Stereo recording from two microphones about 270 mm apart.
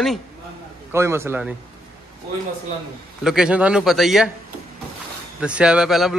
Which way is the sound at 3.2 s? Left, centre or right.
Centre.